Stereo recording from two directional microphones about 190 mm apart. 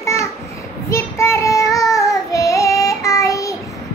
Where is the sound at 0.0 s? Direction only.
15° left (ahead or behind).